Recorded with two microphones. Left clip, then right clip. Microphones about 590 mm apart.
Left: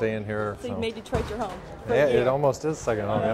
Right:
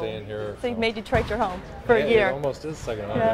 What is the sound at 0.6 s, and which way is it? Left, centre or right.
Speech, centre.